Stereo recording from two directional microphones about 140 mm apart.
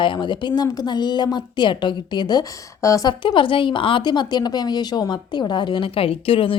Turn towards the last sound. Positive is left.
turn(degrees=40)  # may be behind; listen again after turning